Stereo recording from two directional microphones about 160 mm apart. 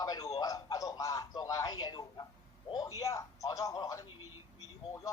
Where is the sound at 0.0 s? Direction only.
20° left (ahead or behind).